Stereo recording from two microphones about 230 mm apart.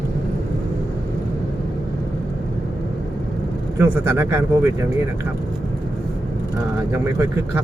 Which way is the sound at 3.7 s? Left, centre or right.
Centre.